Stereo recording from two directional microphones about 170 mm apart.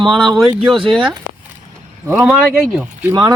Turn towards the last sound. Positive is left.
turn(degrees=-10)  # may be behind; listen again after turning